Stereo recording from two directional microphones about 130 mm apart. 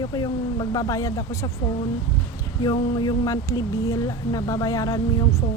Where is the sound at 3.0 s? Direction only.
30° left (ahead or behind).